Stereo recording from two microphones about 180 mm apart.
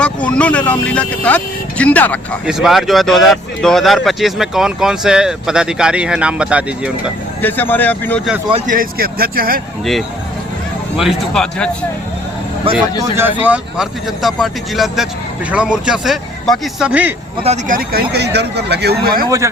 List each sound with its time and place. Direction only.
0.0 s speech: 5° left (ahead or behind)
7.4 s speech: 10° left (ahead or behind)
8.6 s speech: 50° right (ahead or behind)
10.9 s speech: centre (ahead or behind)
12.7 s speech: 30° right (ahead or behind)
13.0 s speech: 10° right (ahead or behind)
17.4 s speech: 35° right (ahead or behind)
17.7 s speech: 60° right (ahead or behind)